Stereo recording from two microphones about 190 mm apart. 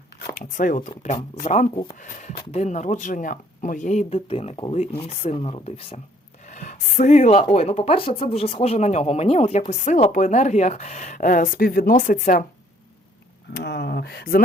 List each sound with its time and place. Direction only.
0.3 s speech: 45° left (ahead or behind)
1.7 s speech: 25° left (ahead or behind)
2.0 s speech: 40° left (ahead or behind)
6.4 s speech: 40° left (ahead or behind)
13.5 s speech: 60° left (ahead or behind)